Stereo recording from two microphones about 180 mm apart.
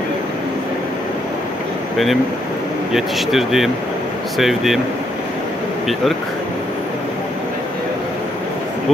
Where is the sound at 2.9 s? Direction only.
Centre (ahead or behind).